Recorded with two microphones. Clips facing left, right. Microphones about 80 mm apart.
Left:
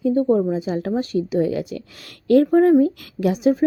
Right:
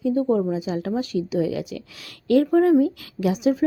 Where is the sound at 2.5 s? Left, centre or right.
Left.